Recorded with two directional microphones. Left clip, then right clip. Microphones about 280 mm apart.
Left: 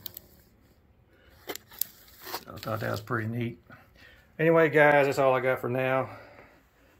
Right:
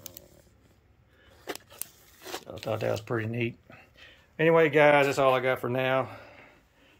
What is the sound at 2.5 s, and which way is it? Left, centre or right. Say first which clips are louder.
Speech: right 3 dB; centre.